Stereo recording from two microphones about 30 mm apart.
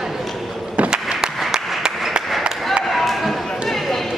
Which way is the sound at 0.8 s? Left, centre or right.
Right.